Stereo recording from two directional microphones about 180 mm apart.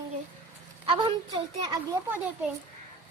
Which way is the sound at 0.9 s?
25° right (ahead or behind).